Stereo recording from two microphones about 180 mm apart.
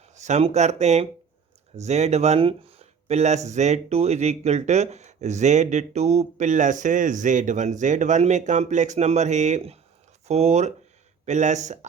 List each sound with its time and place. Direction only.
0.1 s speech: 40° right (ahead or behind)